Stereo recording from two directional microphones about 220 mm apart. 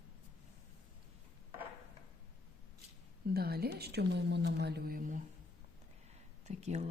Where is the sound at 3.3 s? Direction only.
45° right (ahead or behind).